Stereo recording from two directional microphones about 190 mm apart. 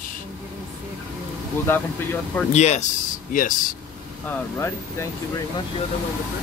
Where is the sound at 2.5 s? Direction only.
35° left (ahead or behind).